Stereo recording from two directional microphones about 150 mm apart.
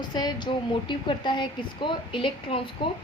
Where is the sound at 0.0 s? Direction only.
30° left (ahead or behind).